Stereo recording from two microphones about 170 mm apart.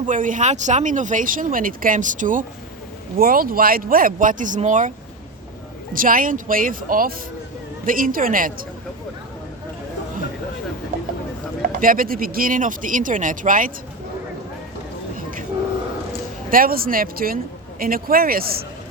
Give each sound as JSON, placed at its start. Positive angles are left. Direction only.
{"t": 0.0, "sound": "speech", "side_deg": -50}
{"t": 5.9, "sound": "speech", "side_deg": -55}
{"t": 11.6, "sound": "speech", "side_deg": -55}
{"t": 15.1, "sound": "a sound", "side_deg": -55}
{"t": 16.5, "sound": "speech", "side_deg": -60}